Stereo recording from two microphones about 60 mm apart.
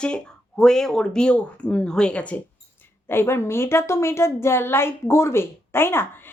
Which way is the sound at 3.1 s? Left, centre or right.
Left.